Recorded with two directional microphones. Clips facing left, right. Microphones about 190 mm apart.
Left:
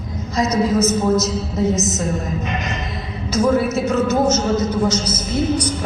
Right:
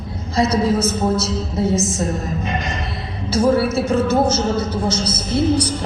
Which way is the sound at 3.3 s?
30° right (ahead or behind).